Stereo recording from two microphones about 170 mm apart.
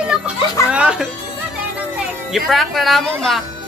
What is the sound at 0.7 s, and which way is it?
Music, 5° right (ahead or behind).